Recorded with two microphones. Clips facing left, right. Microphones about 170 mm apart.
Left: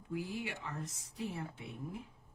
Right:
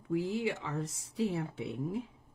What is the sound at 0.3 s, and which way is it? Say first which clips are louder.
Speech: right 8 dB; 75° right (ahead or behind).